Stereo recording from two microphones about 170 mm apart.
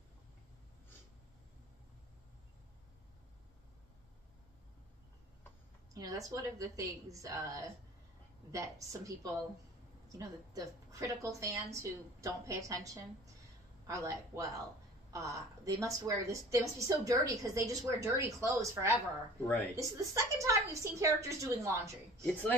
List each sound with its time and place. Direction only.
5.9 s a woman's voice: 20° right (ahead or behind)